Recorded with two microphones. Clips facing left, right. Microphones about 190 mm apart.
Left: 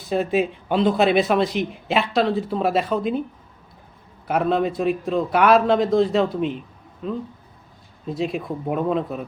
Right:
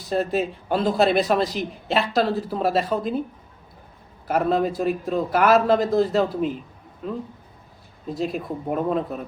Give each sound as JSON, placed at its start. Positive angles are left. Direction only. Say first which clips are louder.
{"t": 0.0, "sound": "speech", "louder": "left 2 dB", "side_deg": 0}
{"t": 4.3, "sound": "speech", "louder": "even", "side_deg": 0}
{"t": 8.1, "sound": "speech", "louder": "left 1 dB", "side_deg": 0}